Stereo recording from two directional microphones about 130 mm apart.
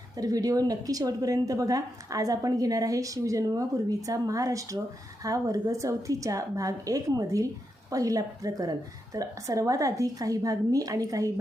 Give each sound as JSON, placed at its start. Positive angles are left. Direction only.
{"t": 0.2, "sound": "a woman's voice", "side_deg": -30}